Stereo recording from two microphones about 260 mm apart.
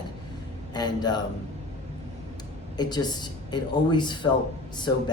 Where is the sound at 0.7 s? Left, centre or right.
Centre.